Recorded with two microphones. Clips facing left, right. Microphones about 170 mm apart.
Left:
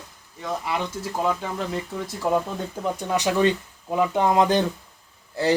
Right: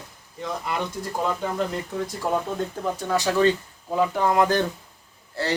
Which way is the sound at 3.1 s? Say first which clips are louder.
Right 1 dB; 20° left (ahead or behind).